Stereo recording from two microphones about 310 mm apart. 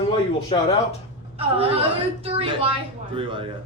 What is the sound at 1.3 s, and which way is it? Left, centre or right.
A woman's voice, centre.